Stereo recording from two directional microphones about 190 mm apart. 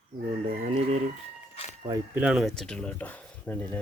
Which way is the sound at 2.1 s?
5° right (ahead or behind).